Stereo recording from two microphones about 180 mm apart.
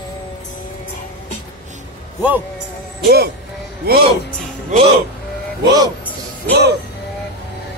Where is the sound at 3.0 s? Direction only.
60° right (ahead or behind).